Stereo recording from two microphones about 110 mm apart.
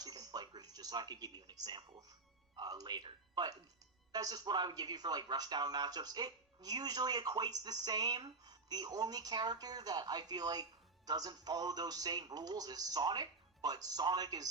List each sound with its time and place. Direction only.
0.0 s music: 35° right (ahead or behind)
2.6 s speech: 40° right (ahead or behind)